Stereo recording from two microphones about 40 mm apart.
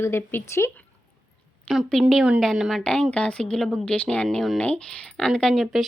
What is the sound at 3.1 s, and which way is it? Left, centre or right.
Speech, left.